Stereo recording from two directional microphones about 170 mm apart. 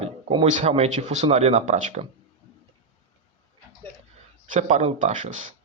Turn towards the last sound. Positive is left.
turn(degrees=-45)  # may be behind; listen again after turning